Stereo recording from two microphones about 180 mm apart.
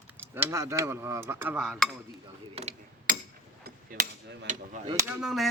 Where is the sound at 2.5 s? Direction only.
35° right (ahead or behind).